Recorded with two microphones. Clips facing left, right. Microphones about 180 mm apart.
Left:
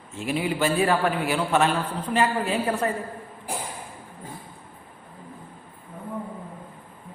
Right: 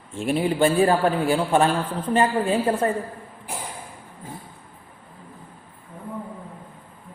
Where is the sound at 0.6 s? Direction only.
30° right (ahead or behind).